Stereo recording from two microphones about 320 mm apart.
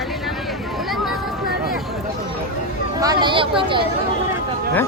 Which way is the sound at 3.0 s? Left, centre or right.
Centre.